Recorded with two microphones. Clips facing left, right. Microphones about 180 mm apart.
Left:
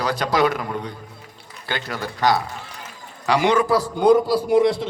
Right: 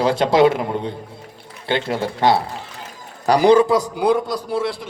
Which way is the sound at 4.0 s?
Centre (ahead or behind).